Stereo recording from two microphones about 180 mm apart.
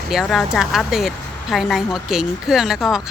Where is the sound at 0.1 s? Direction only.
Centre (ahead or behind).